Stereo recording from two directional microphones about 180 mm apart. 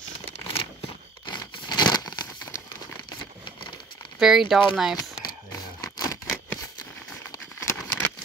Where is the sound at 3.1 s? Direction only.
25° left (ahead or behind).